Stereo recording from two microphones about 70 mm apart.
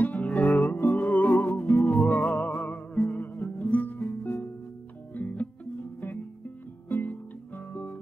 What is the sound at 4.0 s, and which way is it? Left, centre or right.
Music, left.